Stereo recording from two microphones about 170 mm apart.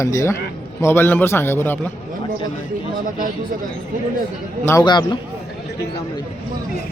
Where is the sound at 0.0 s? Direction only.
20° left (ahead or behind).